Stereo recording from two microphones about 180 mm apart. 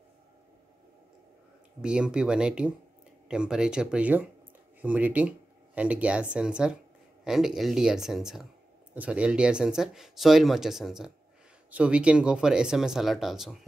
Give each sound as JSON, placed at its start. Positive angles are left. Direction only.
{"t": 1.8, "sound": "speech", "side_deg": -5}